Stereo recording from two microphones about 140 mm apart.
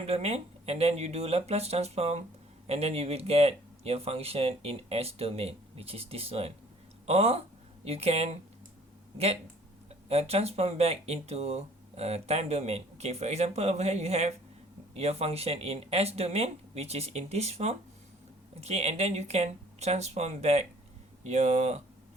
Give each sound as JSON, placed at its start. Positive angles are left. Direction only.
{"t": 0.0, "sound": "speech", "side_deg": -50}